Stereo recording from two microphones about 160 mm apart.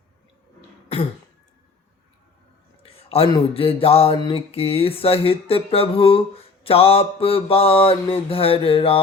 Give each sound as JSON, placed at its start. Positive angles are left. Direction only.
{"t": 2.8, "sound": "speech", "side_deg": 40}